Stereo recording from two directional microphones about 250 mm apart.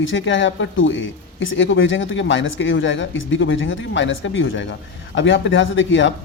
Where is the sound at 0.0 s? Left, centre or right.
Left.